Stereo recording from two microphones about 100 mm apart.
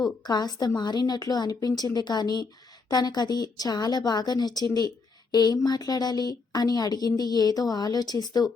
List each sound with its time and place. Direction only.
0.0 s a woman's voice: 40° left (ahead or behind)
5.3 s a sound: 45° left (ahead or behind)
5.5 s a woman's voice: 40° left (ahead or behind)